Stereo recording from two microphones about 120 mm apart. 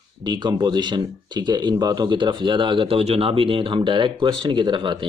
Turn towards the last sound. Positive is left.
turn(degrees=-40)  # may be behind; listen again after turning